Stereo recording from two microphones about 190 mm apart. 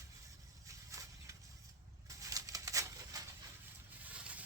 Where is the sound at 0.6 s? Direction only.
15° right (ahead or behind).